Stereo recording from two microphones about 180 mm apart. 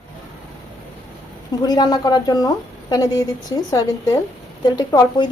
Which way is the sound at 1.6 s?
20° left (ahead or behind).